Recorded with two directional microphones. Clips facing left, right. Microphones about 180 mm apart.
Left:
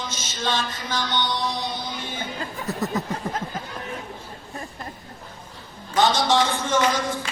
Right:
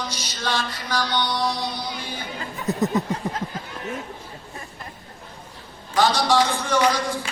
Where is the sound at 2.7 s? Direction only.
20° right (ahead or behind).